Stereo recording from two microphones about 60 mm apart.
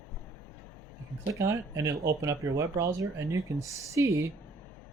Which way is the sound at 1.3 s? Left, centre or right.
Right.